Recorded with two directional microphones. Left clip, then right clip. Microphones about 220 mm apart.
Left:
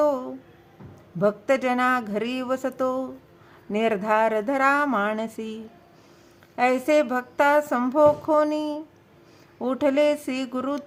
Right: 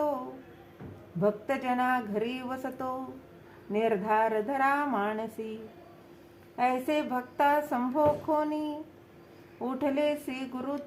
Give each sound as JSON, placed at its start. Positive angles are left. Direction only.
{"t": 1.2, "sound": "speech", "side_deg": 45}
{"t": 6.6, "sound": "speech", "side_deg": 45}